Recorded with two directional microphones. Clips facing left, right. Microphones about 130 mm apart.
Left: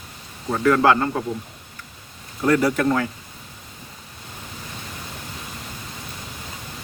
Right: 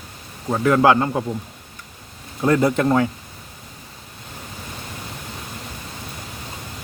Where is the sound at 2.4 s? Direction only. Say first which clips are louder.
Right 1 dB; 25° right (ahead or behind).